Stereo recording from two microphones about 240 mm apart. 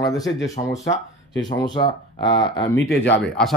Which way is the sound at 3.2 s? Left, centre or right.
Centre.